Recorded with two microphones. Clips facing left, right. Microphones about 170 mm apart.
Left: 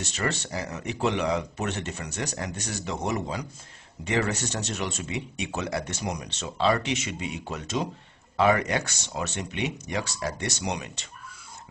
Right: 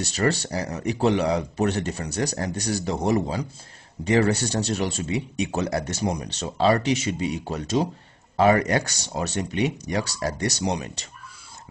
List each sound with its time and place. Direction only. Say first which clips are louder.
0.0 s speech: right 6 dB; 35° right (ahead or behind)